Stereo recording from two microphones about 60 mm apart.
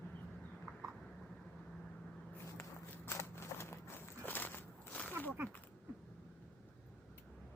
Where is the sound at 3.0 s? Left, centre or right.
Left.